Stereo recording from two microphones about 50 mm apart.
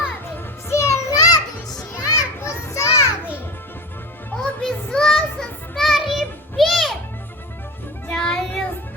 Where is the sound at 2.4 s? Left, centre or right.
Left.